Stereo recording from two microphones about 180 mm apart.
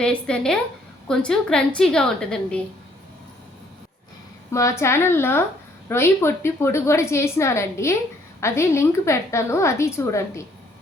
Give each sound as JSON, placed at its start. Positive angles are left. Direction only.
{"t": 0.0, "sound": "a woman's voice", "side_deg": 5}
{"t": 4.5, "sound": "a woman's voice", "side_deg": 15}